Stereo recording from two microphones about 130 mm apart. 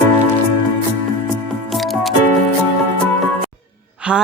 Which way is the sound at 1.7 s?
Centre (ahead or behind).